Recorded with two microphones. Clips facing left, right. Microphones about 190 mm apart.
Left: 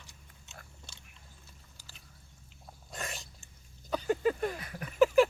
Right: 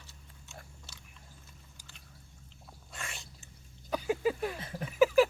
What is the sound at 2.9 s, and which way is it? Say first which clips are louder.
Dog: left 4 dB; 40° left (ahead or behind).